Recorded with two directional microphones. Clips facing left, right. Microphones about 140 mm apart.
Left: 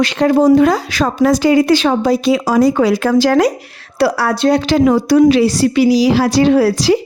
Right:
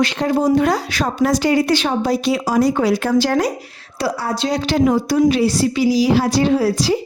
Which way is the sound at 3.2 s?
90° left.